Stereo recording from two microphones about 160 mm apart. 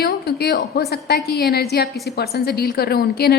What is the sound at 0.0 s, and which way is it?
A woman's voice, 80° left.